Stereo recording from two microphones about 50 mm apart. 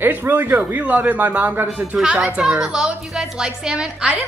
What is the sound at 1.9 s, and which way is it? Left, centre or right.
A woman's voice, centre.